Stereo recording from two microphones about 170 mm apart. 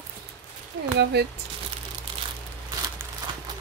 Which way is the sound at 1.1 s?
75° right (ahead or behind).